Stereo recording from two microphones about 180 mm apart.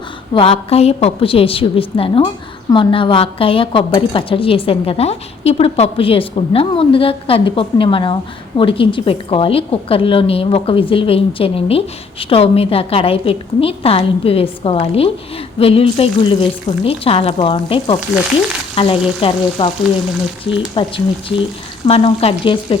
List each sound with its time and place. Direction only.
0.3 s a woman's voice: 30° left (ahead or behind)
18.7 s frying: 30° left (ahead or behind)
19.2 s a woman's voice: 30° left (ahead or behind)